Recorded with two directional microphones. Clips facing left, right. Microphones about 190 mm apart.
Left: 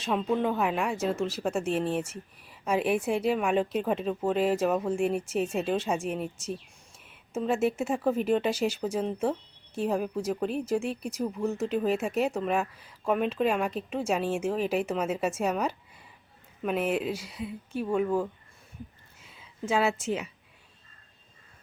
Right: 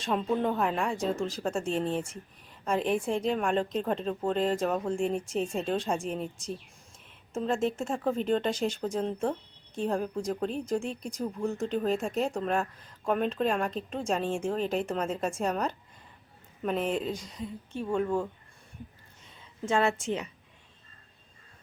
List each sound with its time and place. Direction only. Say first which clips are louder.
0.0 s speech: left 1 dB; centre (ahead or behind)